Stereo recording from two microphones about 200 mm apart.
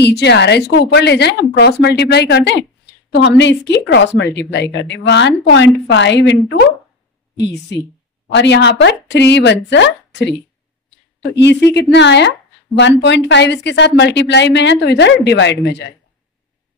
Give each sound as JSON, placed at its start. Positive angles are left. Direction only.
{"t": 0.0, "sound": "a woman's voice", "side_deg": 55}
{"t": 8.3, "sound": "a woman's voice", "side_deg": 65}
{"t": 11.3, "sound": "a woman's voice", "side_deg": 60}